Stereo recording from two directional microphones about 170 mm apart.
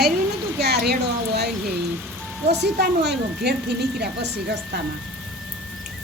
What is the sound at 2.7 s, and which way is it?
Speech, 85° right.